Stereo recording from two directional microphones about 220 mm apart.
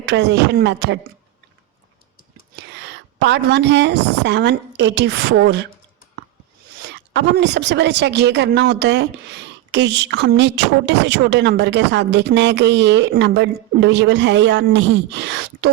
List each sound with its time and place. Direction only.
0.1 s a woman's voice: 50° right (ahead or behind)
2.8 s a woman's voice: 50° right (ahead or behind)
6.8 s a woman's voice: 50° right (ahead or behind)